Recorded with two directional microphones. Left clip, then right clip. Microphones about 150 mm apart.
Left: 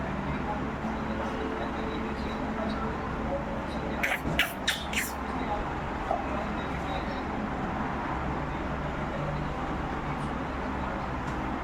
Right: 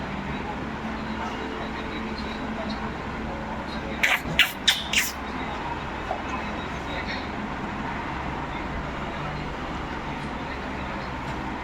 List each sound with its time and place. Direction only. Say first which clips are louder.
4.0 s beatboxing: right 8 dB; 20° left (ahead or behind)